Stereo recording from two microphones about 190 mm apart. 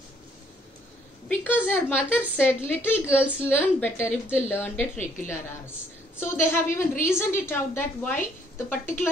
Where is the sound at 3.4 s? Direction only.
10° left (ahead or behind).